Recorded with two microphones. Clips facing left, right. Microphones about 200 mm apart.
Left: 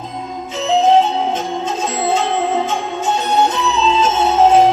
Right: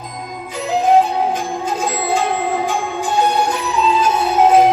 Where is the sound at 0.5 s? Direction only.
25° left (ahead or behind).